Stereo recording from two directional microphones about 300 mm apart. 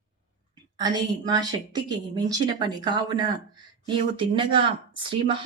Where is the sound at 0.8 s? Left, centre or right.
Centre.